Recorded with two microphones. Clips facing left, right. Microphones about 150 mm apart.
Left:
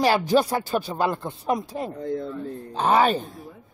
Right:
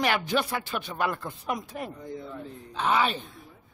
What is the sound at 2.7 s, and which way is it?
Speech, 40° left (ahead or behind).